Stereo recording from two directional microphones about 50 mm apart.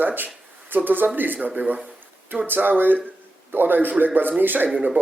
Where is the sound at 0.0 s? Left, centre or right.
Right.